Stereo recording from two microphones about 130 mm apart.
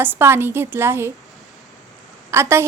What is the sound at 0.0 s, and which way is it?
A woman's voice, 15° right (ahead or behind).